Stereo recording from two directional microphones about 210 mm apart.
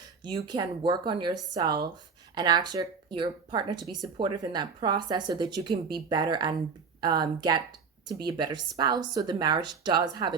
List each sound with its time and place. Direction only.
0.2 s speech: 20° right (ahead or behind)